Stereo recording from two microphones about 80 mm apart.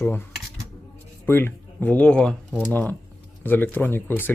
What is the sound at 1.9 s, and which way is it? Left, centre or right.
Speech, centre.